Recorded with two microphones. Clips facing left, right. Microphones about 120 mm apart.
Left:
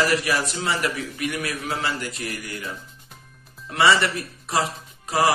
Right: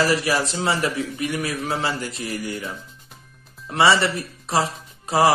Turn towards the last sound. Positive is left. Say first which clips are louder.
# right 3 dB
turn(degrees=-30)  # may be behind; listen again after turning